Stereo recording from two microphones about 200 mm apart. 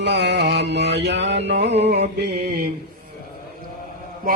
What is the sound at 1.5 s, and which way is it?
Music, 60° right (ahead or behind).